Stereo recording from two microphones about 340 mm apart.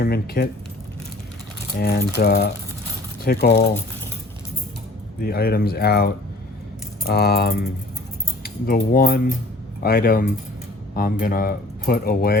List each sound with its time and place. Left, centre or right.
0.0 s speech: left
1.8 s speech: left
5.2 s speech: left